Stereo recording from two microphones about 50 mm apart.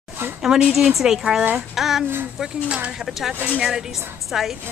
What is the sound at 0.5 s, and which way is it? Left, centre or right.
A woman's voice, centre.